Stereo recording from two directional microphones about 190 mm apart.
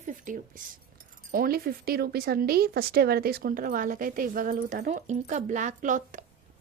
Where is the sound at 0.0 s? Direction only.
45° right (ahead or behind).